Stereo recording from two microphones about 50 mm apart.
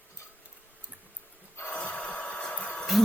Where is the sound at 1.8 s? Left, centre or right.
Left.